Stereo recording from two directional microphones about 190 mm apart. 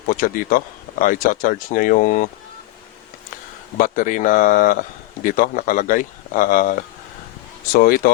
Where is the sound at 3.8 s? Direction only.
45° left (ahead or behind).